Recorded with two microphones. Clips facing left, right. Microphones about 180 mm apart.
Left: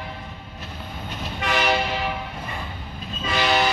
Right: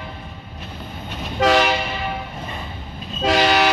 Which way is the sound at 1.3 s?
90° right.